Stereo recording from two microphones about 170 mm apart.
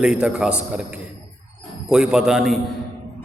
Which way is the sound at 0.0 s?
5° right (ahead or behind).